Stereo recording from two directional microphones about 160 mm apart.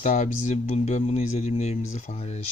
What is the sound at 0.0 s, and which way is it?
Speech, 45° left (ahead or behind).